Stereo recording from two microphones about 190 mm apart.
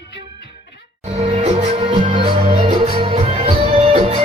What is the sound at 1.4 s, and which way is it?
Music, 35° right (ahead or behind).